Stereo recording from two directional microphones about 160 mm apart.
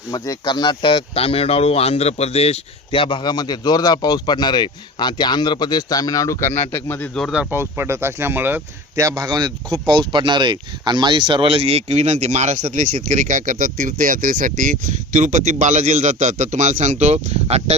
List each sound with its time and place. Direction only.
0.1 s a man's voice: 25° left (ahead or behind); by 7.4 s centre (ahead or behind)
7.5 s speech: 15° right (ahead or behind); by 17.7 s 40° right (ahead or behind)